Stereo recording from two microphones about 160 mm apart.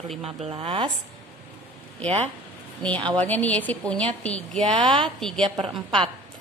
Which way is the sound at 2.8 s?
5° left (ahead or behind).